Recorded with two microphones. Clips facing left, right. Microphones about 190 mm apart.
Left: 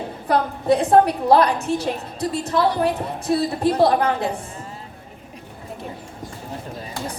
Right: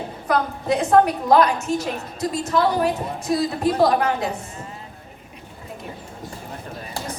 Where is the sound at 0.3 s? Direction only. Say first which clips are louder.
Left 3 dB; 30° left (ahead or behind).